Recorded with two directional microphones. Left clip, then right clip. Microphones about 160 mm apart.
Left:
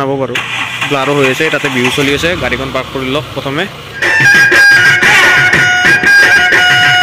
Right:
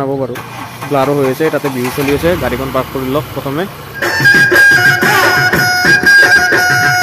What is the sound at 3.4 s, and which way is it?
Speech, 10° right (ahead or behind).